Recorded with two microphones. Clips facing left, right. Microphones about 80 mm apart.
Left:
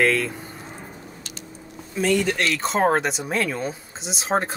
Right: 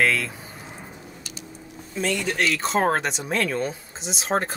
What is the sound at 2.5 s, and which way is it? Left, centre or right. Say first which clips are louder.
Speech: left 3 dB; centre.